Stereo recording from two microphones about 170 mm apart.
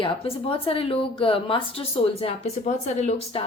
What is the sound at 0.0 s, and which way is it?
A woman's voice, 30° left (ahead or behind).